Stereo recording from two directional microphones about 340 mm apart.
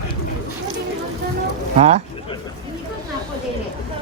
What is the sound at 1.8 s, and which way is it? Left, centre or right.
Speech, centre.